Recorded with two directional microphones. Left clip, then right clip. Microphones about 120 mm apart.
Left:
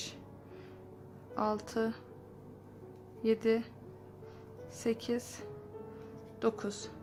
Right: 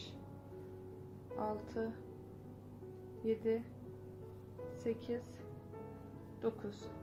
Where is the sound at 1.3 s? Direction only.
55° left (ahead or behind).